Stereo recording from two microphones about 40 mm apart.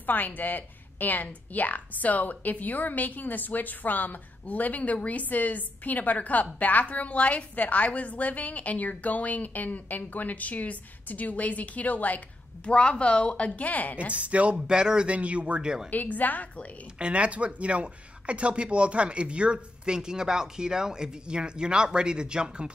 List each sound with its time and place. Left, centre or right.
0.0 s a woman's voice: left
12.6 s speech: left
13.6 s a woman's voice: left
14.1 s speech: right
14.7 s speech: centre
15.0 s speech: right
15.6 s speech: centre
15.9 s a woman's voice: left
17.0 s speech: right